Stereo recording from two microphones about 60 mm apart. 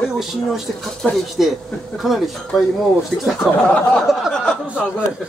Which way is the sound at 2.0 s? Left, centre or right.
Centre.